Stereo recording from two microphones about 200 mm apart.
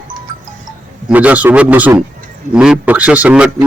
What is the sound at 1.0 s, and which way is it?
A man's voice, 5° right (ahead or behind).